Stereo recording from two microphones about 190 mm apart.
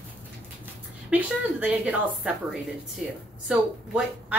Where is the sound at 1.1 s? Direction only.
5° right (ahead or behind).